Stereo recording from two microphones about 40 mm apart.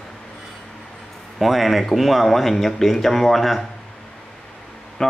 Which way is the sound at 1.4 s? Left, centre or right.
Centre.